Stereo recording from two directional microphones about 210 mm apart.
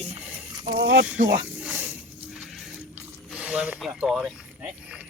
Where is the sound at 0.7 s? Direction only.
55° right (ahead or behind).